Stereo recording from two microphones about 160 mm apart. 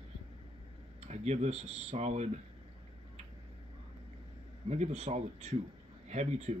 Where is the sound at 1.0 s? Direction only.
45° right (ahead or behind).